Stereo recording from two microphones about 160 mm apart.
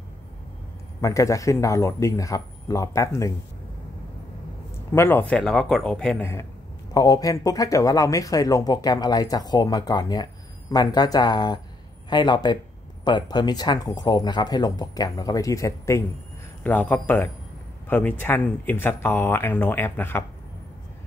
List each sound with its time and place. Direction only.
1.0 s speech: 20° left (ahead or behind)
4.9 s speech: 15° left (ahead or behind)
6.9 s speech: 20° left (ahead or behind)